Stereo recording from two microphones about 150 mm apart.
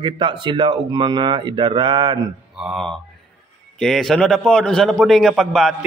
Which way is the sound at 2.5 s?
Centre (ahead or behind).